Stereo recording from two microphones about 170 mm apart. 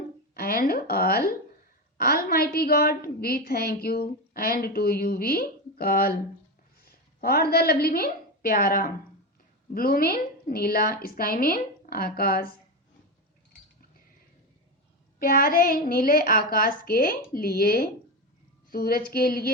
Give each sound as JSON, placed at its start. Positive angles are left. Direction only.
{"t": 0.3, "sound": "a woman's voice", "side_deg": 60}
{"t": 7.2, "sound": "a woman's voice", "side_deg": 65}
{"t": 15.2, "sound": "a woman's voice", "side_deg": 60}